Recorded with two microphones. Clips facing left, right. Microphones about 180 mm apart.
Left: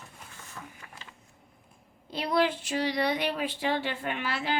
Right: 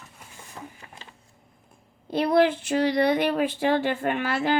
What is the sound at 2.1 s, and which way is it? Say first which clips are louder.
Speech: right 7 dB; 55° right (ahead or behind).